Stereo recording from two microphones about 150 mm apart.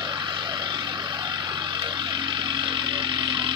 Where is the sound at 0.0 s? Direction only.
30° right (ahead or behind).